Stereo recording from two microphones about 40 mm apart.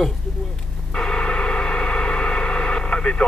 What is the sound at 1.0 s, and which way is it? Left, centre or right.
Gong, left.